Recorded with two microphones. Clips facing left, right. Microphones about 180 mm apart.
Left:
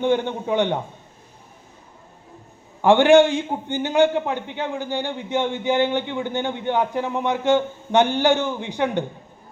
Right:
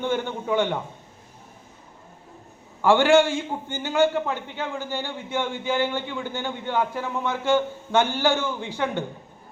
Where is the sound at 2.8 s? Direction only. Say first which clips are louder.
Left 4 dB; 20° left (ahead or behind).